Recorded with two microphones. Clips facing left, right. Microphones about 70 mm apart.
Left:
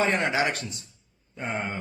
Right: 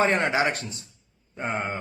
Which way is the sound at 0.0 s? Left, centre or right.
Right.